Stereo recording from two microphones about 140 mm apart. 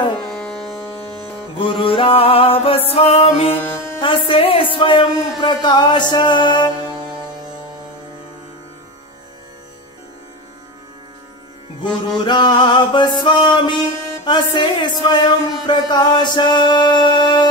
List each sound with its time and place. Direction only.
0.2 s music: 5° left (ahead or behind)
1.6 s music: 40° left (ahead or behind)
12.3 s music: 35° left (ahead or behind)